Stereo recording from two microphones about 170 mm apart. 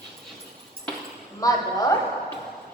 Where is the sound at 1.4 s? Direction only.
20° left (ahead or behind).